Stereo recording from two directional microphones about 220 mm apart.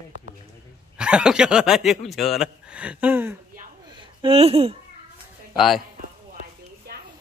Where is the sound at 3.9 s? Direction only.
20° right (ahead or behind).